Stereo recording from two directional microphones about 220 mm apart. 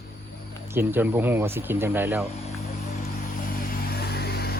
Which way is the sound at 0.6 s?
10° right (ahead or behind).